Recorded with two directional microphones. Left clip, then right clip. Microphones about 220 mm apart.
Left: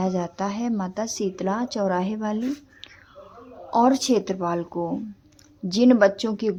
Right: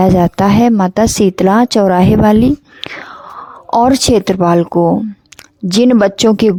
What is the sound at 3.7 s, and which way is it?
Speech, 50° right (ahead or behind).